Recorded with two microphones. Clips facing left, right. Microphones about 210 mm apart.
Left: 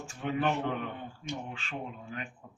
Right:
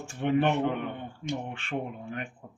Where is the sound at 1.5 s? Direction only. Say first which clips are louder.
Right 6 dB; 60° right (ahead or behind).